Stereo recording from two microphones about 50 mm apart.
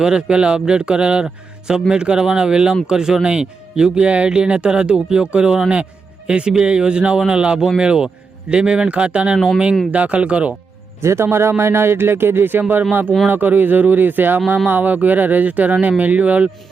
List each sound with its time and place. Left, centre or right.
0.0 s speech: centre
11.0 s speech: right